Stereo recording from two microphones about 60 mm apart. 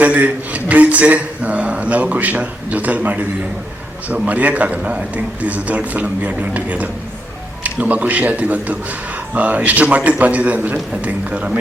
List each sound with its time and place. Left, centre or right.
0.0 s speech: right